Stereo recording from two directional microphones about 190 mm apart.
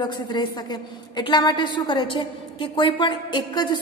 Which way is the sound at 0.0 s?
20° left (ahead or behind).